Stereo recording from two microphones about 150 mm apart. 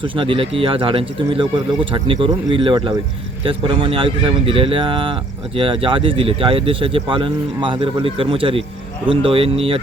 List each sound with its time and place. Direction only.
0.0 s speech: 35° right (ahead or behind)